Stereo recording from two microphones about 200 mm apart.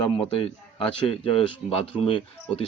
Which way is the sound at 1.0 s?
30° left (ahead or behind).